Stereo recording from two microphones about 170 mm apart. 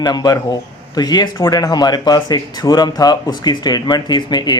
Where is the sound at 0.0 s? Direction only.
25° left (ahead or behind).